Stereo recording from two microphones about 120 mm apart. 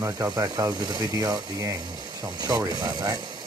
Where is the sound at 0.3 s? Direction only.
35° right (ahead or behind).